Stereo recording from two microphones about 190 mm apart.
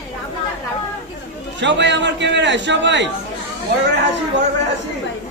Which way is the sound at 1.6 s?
70° right (ahead or behind).